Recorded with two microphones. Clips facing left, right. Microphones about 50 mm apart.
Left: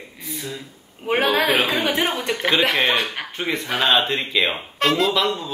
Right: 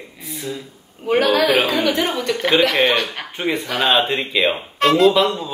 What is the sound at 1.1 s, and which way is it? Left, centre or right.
A man's voice, left.